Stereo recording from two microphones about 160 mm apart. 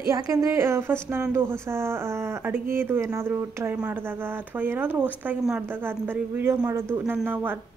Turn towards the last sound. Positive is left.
turn(degrees=-15)  # may be behind; listen again after turning